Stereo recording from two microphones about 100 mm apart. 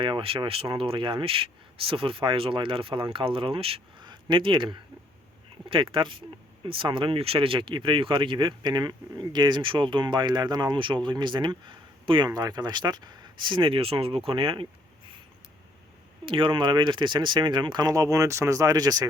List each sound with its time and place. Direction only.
0.0 s speech: 60° right (ahead or behind)
4.0 s speech: 50° right (ahead or behind)
12.3 s speech: 40° right (ahead or behind); by 14.7 s 60° right (ahead or behind)
16.2 s speech: 60° right (ahead or behind); by 19.0 s 40° right (ahead or behind)